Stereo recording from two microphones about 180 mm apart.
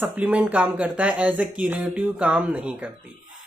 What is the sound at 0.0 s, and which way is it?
Speech, 10° right (ahead or behind).